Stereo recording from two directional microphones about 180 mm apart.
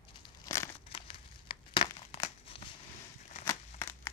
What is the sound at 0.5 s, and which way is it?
Crumpling, 20° left (ahead or behind).